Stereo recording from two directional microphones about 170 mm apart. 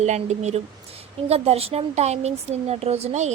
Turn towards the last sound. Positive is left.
turn(degrees=-40)  # may be behind; listen again after turning